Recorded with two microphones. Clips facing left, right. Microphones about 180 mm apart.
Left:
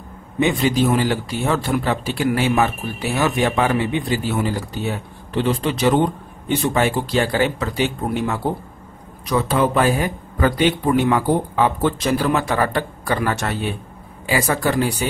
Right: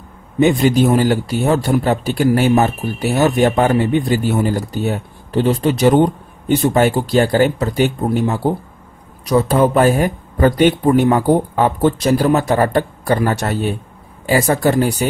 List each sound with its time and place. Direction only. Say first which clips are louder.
0.4 s a man's voice: right 5 dB; 45° right (ahead or behind)